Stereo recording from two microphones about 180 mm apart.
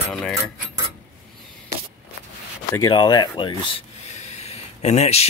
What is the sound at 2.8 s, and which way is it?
Speech, 25° left (ahead or behind).